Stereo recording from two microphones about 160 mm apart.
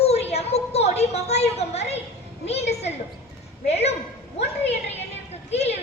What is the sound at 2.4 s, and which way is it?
Speech, 40° left (ahead or behind).